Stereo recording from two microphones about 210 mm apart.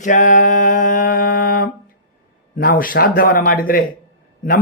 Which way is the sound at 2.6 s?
45° left (ahead or behind).